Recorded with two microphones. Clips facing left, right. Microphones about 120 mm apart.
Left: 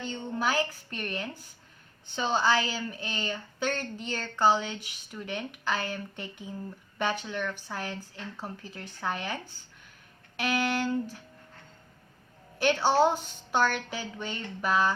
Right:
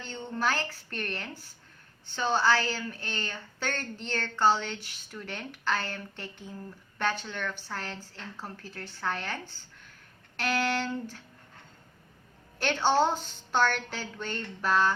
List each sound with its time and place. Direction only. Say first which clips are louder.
0.0 s a woman's voice: left 1 dB; 10° left (ahead or behind)
12.5 s a woman's voice: left 2 dB; 10° left (ahead or behind)